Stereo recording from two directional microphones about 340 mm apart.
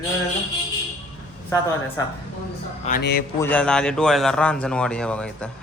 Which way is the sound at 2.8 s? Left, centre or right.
Left.